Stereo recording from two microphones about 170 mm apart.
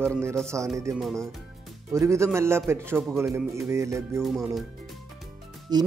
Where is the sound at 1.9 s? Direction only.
15° right (ahead or behind).